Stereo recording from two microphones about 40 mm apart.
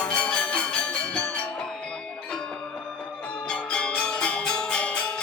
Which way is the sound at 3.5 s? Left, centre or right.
Left.